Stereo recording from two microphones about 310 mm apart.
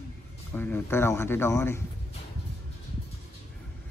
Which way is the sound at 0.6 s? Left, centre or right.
Centre.